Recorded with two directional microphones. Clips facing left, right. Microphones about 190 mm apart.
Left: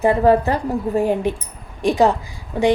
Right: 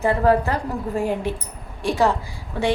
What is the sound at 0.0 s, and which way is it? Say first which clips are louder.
A woman's voice: left 4 dB; 20° left (ahead or behind).